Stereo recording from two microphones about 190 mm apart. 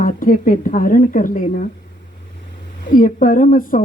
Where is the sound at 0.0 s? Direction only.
45° left (ahead or behind).